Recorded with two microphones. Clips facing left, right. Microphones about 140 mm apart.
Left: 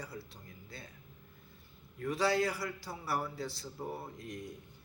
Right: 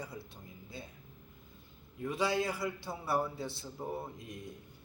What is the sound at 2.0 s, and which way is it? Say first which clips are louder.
A man's voice: left 1 dB; 20° right (ahead or behind).